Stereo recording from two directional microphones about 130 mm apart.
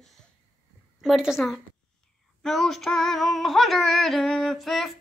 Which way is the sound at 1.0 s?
5° right (ahead or behind).